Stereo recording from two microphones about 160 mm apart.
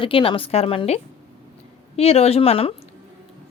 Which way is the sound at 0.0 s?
35° left (ahead or behind).